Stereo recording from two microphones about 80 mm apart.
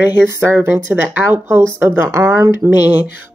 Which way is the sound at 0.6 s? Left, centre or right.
Right.